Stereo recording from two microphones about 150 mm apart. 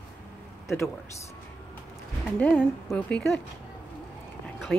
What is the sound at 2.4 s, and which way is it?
Speech, 10° left (ahead or behind).